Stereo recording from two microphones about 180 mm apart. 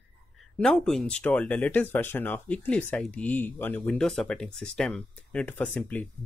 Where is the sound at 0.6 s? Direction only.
5° left (ahead or behind).